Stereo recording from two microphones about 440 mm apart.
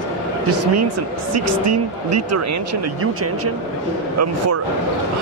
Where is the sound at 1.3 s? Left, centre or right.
Right.